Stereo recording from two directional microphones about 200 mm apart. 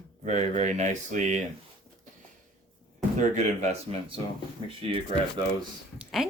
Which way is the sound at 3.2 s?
35° right (ahead or behind).